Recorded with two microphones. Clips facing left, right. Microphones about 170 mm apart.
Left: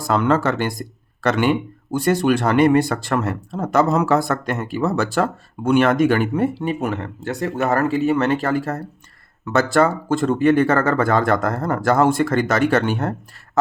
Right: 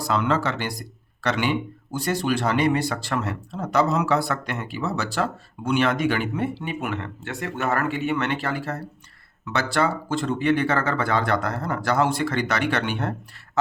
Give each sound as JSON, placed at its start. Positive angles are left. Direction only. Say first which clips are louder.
{"t": 0.0, "sound": "speech", "louder": "left 5 dB", "side_deg": 50}